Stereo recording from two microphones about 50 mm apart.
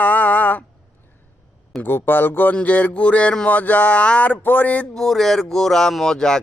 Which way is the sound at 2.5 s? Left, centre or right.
Left.